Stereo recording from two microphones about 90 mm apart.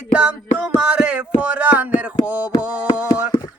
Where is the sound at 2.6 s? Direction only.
15° right (ahead or behind).